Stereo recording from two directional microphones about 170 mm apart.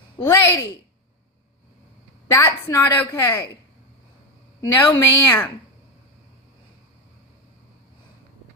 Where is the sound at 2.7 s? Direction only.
15° left (ahead or behind).